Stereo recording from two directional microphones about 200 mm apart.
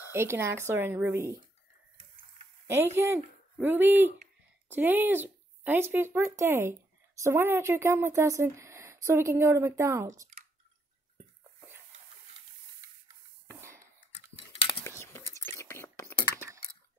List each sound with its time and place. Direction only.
0.1 s a woman's voice: 10° right (ahead or behind)
2.6 s a woman's voice: 10° right (ahead or behind)
13.5 s a sound: 15° right (ahead or behind)
14.3 s cutlery: 30° left (ahead or behind)
14.8 s whispering: 10° left (ahead or behind)